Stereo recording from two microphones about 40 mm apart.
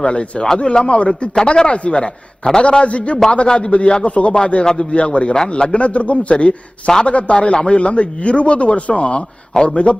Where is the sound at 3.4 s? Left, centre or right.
Left.